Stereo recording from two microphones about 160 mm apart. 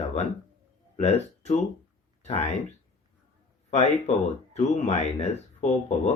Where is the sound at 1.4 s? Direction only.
45° left (ahead or behind).